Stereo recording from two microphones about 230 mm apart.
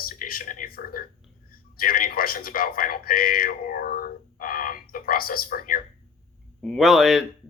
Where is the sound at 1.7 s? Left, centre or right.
Left.